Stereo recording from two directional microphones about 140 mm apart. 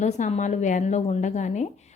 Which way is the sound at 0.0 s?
60° left (ahead or behind).